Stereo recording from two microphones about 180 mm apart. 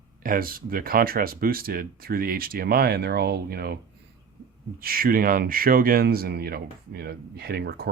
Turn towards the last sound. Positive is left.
turn(degrees=-60)  # may be behind; listen again after turning